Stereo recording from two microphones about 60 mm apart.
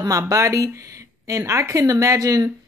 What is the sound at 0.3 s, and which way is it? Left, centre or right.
Speech, right.